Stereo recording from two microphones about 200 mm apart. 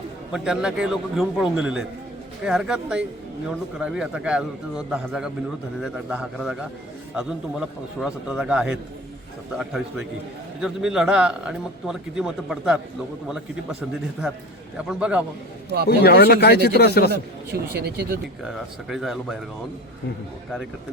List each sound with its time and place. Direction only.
0.3 s speech: centre (ahead or behind)
10.6 s speech: 5° right (ahead or behind)
14.8 s speech: 5° right (ahead or behind)
15.9 s speech: 55° left (ahead or behind)
17.1 s a man's voice: 55° right (ahead or behind)
18.4 s speech: centre (ahead or behind)